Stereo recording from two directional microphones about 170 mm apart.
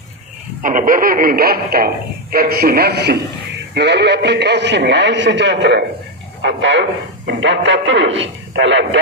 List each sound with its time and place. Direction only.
0.6 s a man's voice: 50° right (ahead or behind); by 9.0 s 90° right